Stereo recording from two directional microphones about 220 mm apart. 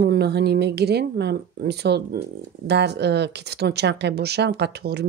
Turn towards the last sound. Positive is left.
turn(degrees=-50)  # may be behind; listen again after turning